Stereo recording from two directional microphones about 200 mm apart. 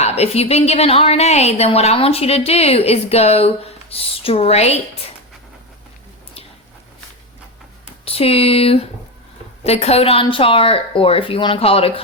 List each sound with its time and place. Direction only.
0.0 s a woman's voice: 30° left (ahead or behind)
8.0 s a woman's voice: 30° left (ahead or behind)